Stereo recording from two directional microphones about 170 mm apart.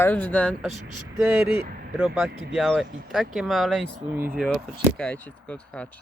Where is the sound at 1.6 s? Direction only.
60° right (ahead or behind).